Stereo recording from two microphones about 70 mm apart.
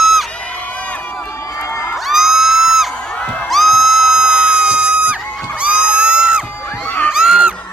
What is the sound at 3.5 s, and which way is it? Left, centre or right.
Music, centre.